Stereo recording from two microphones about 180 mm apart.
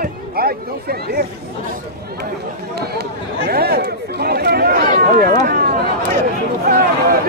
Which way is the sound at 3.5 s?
60° right (ahead or behind).